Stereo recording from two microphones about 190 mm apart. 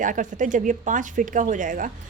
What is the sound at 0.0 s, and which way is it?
Speech, 45° right (ahead or behind).